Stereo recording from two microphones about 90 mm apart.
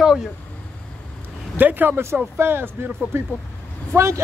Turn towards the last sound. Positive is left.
turn(degrees=-30)  # may be behind; listen again after turning